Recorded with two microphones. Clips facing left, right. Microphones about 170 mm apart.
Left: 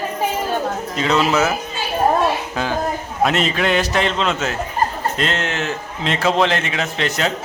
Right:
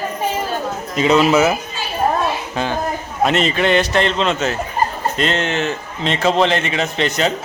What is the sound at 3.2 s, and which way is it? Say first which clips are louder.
A man's voice: right 2 dB; centre (ahead or behind).